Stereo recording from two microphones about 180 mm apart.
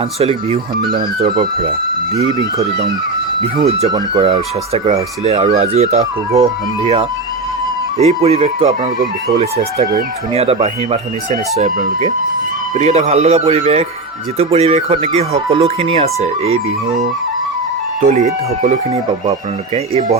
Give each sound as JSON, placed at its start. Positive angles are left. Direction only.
{"t": 0.2, "sound": "speech", "side_deg": -30}
{"t": 4.1, "sound": "speech", "side_deg": -30}
{"t": 10.3, "sound": "speech", "side_deg": -35}
{"t": 11.5, "sound": "speech", "side_deg": -45}
{"t": 18.0, "sound": "speech", "side_deg": -45}